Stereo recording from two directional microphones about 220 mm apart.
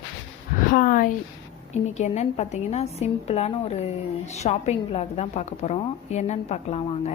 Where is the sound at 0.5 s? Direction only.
35° left (ahead or behind).